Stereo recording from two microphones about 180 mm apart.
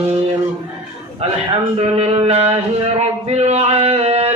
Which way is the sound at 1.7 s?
35° right (ahead or behind).